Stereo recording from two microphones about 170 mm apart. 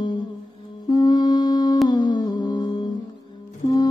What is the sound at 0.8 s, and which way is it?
Music, 25° left (ahead or behind).